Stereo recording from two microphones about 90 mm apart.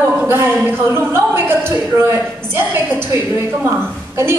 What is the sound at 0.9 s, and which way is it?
A woman's voice, 25° right (ahead or behind).